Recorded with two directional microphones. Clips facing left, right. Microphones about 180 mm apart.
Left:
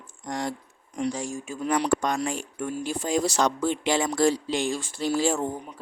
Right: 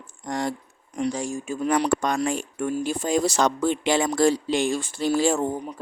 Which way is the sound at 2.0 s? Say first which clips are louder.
Right 3 dB; 60° right (ahead or behind).